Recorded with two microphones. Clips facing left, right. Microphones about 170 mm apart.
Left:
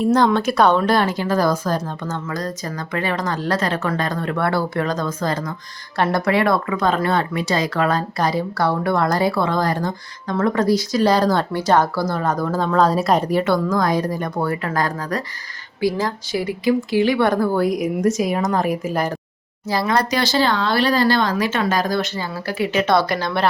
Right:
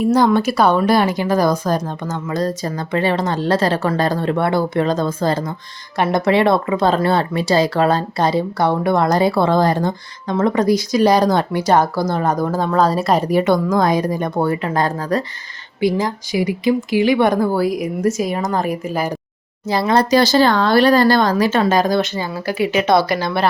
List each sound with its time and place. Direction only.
0.0 s a woman's voice: 10° right (ahead or behind)
2.3 s speech: 30° right (ahead or behind); by 13.2 s centre (ahead or behind)
13.2 s a woman's voice: 15° right (ahead or behind)
17.6 s speech: centre (ahead or behind)
19.6 s speech: 25° right (ahead or behind); by 23.5 s 5° right (ahead or behind)